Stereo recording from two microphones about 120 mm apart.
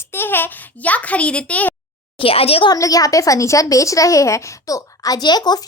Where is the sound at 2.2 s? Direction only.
55° left (ahead or behind).